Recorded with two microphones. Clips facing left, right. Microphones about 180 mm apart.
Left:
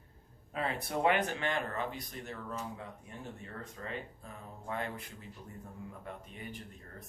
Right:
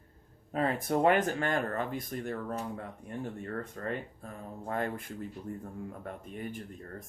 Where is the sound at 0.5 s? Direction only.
45° right (ahead or behind).